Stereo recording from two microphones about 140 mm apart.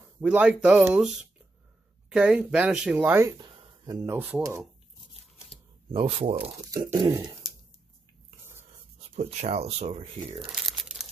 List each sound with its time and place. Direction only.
0.2 s speech: 10° right (ahead or behind)
2.0 s speech: 5° right (ahead or behind)
3.3 s a sound: 35° right (ahead or behind)
4.2 s speech: 15° right (ahead or behind)
5.9 s speech: 40° right (ahead or behind)
6.7 s speech: 25° right (ahead or behind)
9.1 s speech: 50° right (ahead or behind)
10.5 s crumpling: centre (ahead or behind)